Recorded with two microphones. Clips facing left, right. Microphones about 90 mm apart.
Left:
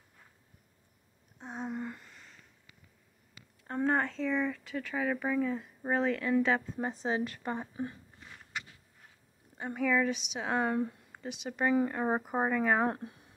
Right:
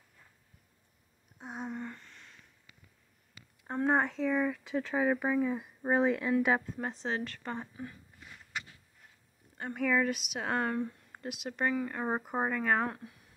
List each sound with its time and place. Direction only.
1.4 s a sound: 5° right (ahead or behind)
3.6 s speech: 10° right (ahead or behind)
6.8 s speech: 5° left (ahead or behind)
7.7 s speech: 30° left (ahead or behind)
9.6 s speech: 5° left (ahead or behind)
10.7 s speech: 15° left (ahead or behind)
11.1 s speech: 5° right (ahead or behind)
12.8 s speech: 30° left (ahead or behind)